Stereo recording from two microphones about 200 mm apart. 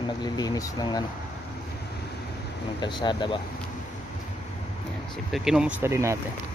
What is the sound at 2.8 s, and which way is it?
Speech, 20° left (ahead or behind).